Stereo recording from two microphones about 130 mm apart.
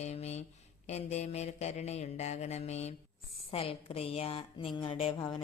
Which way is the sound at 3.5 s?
45° left (ahead or behind).